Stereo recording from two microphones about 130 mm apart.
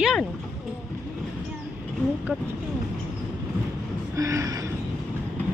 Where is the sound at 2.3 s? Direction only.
10° right (ahead or behind).